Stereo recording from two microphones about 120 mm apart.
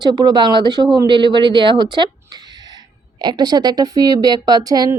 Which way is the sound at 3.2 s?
35° right (ahead or behind).